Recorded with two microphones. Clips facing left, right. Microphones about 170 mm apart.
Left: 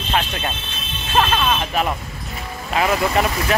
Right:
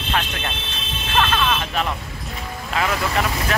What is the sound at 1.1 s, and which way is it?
Speech, 20° left (ahead or behind).